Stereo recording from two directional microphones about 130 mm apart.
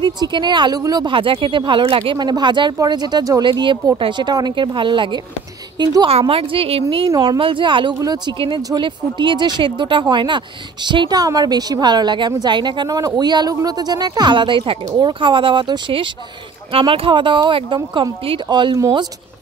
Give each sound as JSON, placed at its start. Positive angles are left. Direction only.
{"t": 0.0, "sound": "a woman's voice", "side_deg": -35}
{"t": 7.1, "sound": "speech", "side_deg": -35}